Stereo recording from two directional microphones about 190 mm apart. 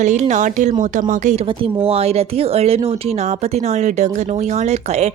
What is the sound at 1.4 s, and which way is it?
Speech, 25° right (ahead or behind).